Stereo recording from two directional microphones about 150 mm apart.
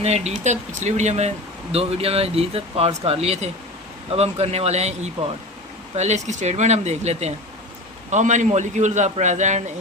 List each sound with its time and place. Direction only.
0.0 s a man's voice: 45° right (ahead or behind)